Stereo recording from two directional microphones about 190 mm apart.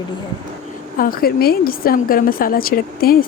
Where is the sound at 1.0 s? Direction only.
50° left (ahead or behind).